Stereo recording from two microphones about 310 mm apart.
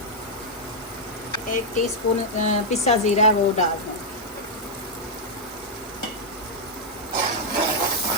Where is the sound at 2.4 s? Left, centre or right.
Left.